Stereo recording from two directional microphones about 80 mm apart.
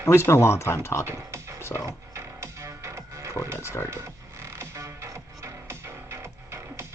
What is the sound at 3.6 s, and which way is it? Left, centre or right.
Speech, left.